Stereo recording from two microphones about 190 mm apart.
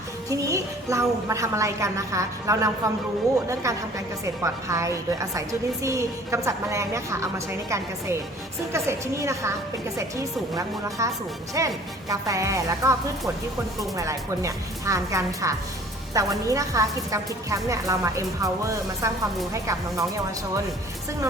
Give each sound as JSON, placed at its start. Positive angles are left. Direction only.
{"t": 0.3, "sound": "a woman's voice", "side_deg": -15}